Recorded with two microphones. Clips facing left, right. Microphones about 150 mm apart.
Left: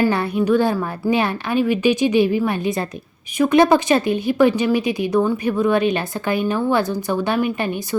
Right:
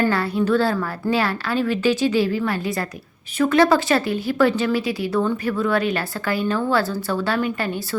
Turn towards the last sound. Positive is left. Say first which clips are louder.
# left 2 dB
turn(degrees=20)  # may be behind; listen again after turning